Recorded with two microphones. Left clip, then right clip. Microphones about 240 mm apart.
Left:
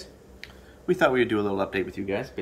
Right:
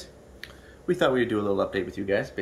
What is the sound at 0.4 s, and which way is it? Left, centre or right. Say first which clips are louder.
Speech: right 1 dB; centre.